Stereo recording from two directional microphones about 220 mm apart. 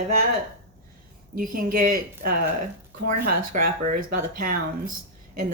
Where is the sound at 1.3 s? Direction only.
40° right (ahead or behind).